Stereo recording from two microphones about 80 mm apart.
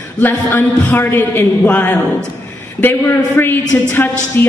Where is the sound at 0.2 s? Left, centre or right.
Left.